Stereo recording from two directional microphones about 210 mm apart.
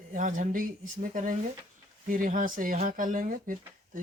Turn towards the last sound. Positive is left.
turn(degrees=-40)  # may be behind; listen again after turning